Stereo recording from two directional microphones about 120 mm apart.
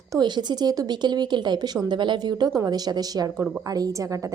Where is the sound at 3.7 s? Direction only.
30° right (ahead or behind).